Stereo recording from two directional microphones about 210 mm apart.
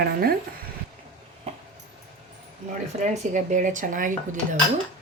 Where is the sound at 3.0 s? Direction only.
35° right (ahead or behind).